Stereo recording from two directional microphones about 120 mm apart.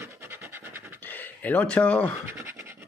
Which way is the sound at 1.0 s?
15° left (ahead or behind).